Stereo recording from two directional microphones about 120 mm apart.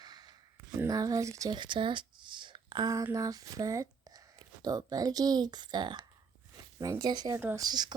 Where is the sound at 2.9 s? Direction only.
25° right (ahead or behind).